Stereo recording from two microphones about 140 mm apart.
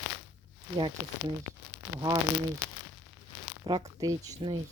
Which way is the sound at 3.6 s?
30° right (ahead or behind).